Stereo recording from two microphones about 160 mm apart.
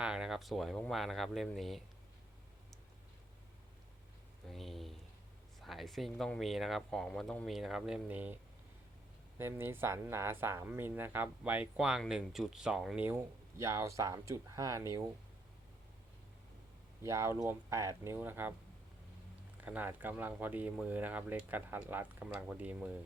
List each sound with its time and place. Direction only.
0.0 s speech: 5° right (ahead or behind)
4.4 s speech: centre (ahead or behind)
9.4 s speech: 15° right (ahead or behind)
13.1 s speech: 15° right (ahead or behind)
17.0 s speech: 20° right (ahead or behind)
19.6 s speech: 10° right (ahead or behind)